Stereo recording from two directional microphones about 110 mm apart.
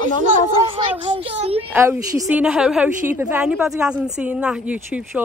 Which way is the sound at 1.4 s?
65° right (ahead or behind).